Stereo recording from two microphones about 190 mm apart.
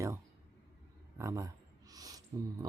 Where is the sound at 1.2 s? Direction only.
15° right (ahead or behind).